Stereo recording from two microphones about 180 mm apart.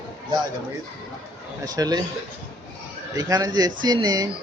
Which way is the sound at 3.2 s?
20° right (ahead or behind).